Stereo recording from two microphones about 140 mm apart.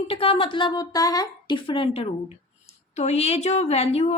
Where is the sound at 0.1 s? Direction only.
45° left (ahead or behind).